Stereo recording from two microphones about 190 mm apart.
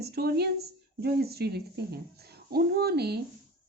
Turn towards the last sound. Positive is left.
turn(degrees=-60)  # may be behind; listen again after turning